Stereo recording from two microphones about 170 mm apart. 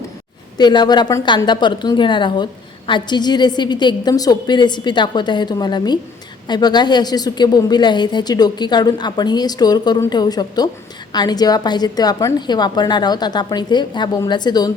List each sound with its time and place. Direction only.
0.5 s a woman's voice: 25° left (ahead or behind)